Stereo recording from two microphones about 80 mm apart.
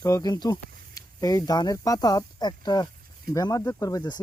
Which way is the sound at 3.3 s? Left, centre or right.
Left.